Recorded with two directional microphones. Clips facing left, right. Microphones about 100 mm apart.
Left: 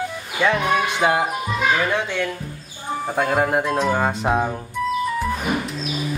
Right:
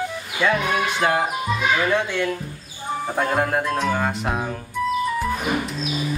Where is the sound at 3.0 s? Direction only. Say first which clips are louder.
Left 2 dB; 5° left (ahead or behind).